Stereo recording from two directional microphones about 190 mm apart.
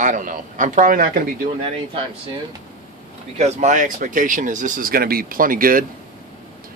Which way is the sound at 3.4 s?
40° right (ahead or behind).